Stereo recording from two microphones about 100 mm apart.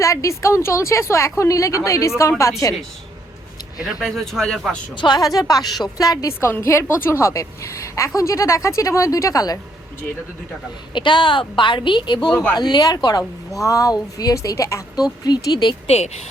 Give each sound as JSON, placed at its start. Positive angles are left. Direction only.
{"t": 0.0, "sound": "a woman's voice", "side_deg": 30}
{"t": 3.8, "sound": "speech", "side_deg": 0}
{"t": 4.9, "sound": "a woman's voice", "side_deg": 45}
{"t": 10.9, "sound": "speech", "side_deg": 55}
{"t": 12.3, "sound": "speech", "side_deg": 15}
{"t": 12.5, "sound": "a woman's voice", "side_deg": 45}
{"t": 15.9, "sound": "a woman's voice", "side_deg": 90}